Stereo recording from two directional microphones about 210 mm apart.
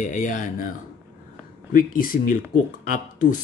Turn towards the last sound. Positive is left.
turn(degrees=40)  # may be behind; listen again after turning